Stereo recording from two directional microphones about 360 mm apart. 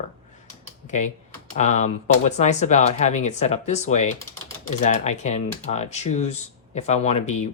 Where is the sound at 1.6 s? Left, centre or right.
Centre.